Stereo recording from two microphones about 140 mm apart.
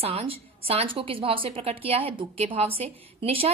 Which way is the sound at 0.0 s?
45° right (ahead or behind).